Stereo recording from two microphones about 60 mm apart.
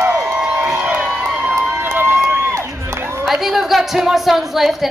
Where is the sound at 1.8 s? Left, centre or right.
Right.